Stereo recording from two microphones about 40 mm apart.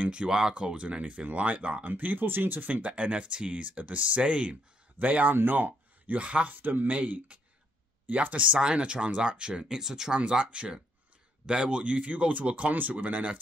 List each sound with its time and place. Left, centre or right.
0.0 s speech: right
1.9 s speech: right
2.6 s speech: right
2.9 s speech: right
4.9 s speech: right
6.1 s speech: right
7.3 s a sound: right
8.1 s speech: right
9.7 s speech: centre
10.2 s speech: right